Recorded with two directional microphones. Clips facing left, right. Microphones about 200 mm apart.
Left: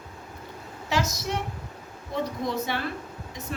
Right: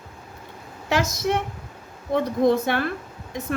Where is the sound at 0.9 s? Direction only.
55° right (ahead or behind).